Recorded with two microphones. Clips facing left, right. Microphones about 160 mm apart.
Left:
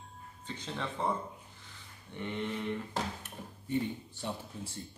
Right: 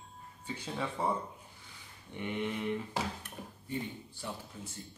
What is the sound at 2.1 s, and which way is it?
Speech, 15° right (ahead or behind).